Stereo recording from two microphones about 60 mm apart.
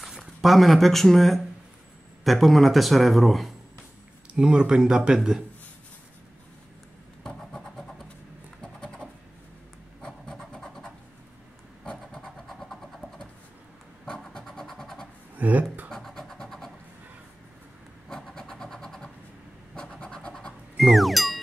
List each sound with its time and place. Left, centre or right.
0.0 s speech: centre
4.3 s speech: centre
7.2 s vehicle: centre
8.8 s a sound: centre
11.8 s vehicle: centre
14.0 s vehicle: centre
15.3 s a sound: right
15.9 s vehicle: centre
18.0 s vehicle: centre
19.7 s scratch: centre
20.7 s music: centre